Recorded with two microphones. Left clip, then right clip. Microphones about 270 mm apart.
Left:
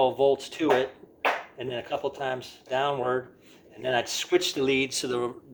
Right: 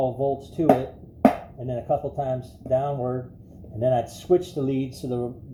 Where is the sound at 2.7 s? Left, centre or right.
Left.